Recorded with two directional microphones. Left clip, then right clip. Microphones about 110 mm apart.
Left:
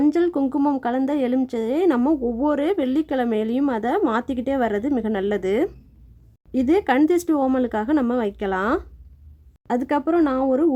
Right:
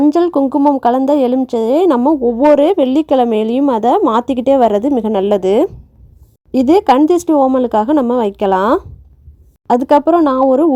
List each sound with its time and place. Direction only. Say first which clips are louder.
0.1 s speech: right 8 dB; 45° right (ahead or behind)
0.4 s speech: right 10 dB; 30° right (ahead or behind)
0.8 s speech: right 11 dB; 50° right (ahead or behind); by 7.6 s 30° right (ahead or behind)
7.6 s speech: right 9 dB; 45° right (ahead or behind)